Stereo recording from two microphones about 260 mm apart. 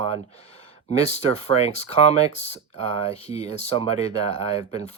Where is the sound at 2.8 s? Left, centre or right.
Right.